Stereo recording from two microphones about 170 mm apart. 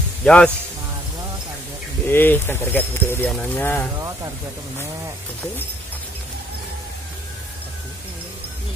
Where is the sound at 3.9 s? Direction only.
20° right (ahead or behind).